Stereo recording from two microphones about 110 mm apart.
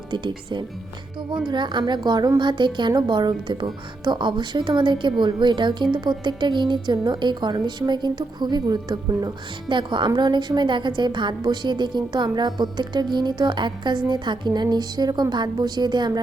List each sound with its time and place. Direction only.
0.1 s a woman's voice: 45° right (ahead or behind)